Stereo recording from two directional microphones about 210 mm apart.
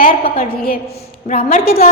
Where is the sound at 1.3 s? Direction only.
35° left (ahead or behind).